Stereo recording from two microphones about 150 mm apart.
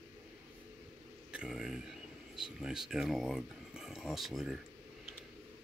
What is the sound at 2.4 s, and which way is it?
Speech, 5° right (ahead or behind).